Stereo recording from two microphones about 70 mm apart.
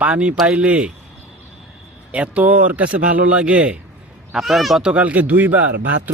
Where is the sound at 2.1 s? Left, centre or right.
Centre.